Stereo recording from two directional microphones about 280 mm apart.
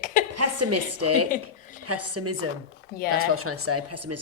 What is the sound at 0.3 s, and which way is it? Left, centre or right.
A woman's voice, right.